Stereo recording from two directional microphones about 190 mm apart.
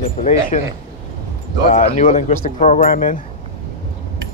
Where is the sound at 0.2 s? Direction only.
40° left (ahead or behind).